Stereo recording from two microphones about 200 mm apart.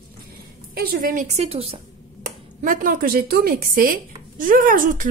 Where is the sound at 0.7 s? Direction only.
50° right (ahead or behind); by 1.8 s 30° right (ahead or behind).